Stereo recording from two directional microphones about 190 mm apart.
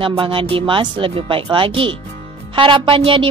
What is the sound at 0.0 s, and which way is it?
A woman's voice, 25° right (ahead or behind).